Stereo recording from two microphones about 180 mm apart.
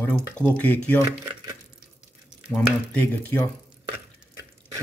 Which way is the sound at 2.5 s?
5° left (ahead or behind).